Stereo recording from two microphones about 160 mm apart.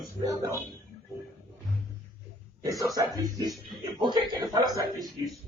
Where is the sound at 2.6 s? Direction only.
20° right (ahead or behind).